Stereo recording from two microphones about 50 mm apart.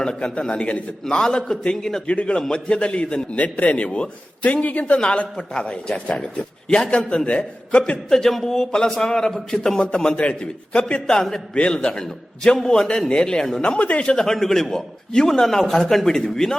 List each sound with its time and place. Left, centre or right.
0.0 s a man's voice: centre
2.0 s a man's voice: left
3.3 s a man's voice: left
8.1 s a man's voice: centre
9.8 s a man's voice: left
11.0 s a man's voice: centre
11.5 s a man's voice: left
14.1 s a man's voice: centre